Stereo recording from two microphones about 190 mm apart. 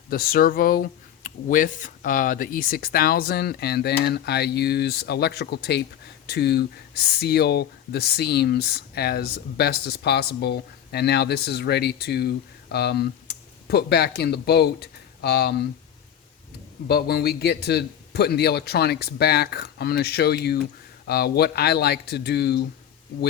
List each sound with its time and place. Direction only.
0.1 s speech: 50° left (ahead or behind)
16.9 s speech: 55° left (ahead or behind)